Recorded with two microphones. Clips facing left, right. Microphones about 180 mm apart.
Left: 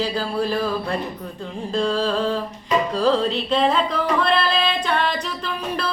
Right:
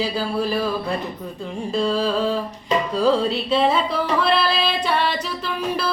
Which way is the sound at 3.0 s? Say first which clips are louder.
Right 3 dB; 5° right (ahead or behind).